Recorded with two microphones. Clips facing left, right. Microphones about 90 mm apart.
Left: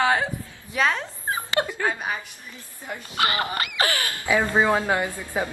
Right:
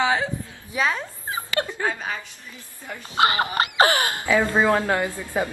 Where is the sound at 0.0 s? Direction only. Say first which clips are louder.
Left 1 dB; 5° left (ahead or behind).